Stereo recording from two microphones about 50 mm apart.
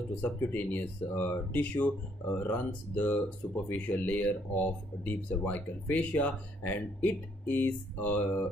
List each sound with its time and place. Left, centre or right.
0.4 s speech: left